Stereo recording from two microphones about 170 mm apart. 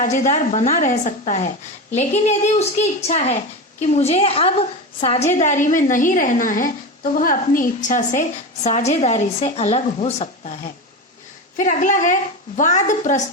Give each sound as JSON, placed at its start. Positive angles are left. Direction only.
{"t": 0.0, "sound": "speech", "side_deg": 50}